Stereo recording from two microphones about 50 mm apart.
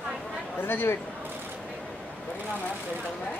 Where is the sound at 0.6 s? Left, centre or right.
Left.